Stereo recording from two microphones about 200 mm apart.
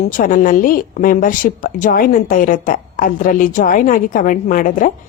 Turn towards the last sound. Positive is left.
turn(degrees=40)  # may be behind; listen again after turning